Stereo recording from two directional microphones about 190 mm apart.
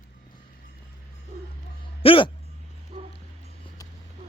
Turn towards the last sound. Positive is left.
turn(degrees=-30)  # may be behind; listen again after turning